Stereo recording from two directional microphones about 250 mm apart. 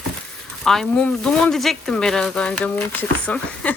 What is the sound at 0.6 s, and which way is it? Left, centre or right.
Speech, centre.